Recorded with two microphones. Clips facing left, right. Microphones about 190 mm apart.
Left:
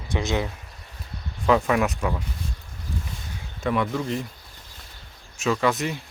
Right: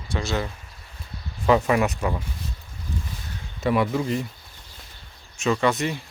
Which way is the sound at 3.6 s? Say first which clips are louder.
Right 2 dB; 10° right (ahead or behind).